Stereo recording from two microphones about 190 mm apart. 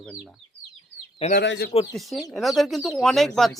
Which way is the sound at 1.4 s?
65° left (ahead or behind).